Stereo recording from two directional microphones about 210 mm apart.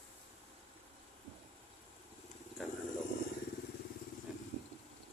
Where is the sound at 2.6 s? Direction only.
Centre (ahead or behind).